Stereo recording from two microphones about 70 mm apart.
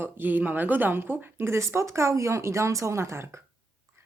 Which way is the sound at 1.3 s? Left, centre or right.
Right.